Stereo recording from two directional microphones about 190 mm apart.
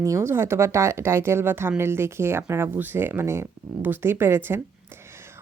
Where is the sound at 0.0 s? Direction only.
15° right (ahead or behind).